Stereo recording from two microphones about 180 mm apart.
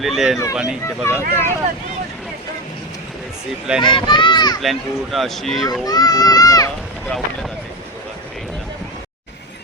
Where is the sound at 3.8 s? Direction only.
25° left (ahead or behind).